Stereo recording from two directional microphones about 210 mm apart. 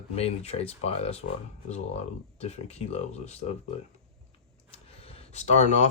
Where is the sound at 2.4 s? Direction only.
30° left (ahead or behind).